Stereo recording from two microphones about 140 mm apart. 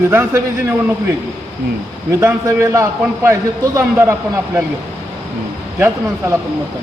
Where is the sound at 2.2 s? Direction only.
20° right (ahead or behind).